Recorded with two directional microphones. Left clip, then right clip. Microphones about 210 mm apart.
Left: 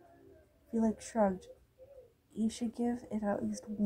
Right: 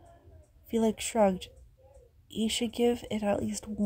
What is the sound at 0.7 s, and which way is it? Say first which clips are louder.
Speech: right 6 dB; 65° right (ahead or behind).